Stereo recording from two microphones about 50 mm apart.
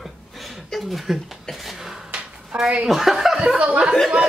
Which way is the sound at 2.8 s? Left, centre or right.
Centre.